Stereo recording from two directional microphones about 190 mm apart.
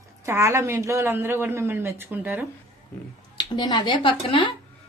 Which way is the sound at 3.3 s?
25° left (ahead or behind).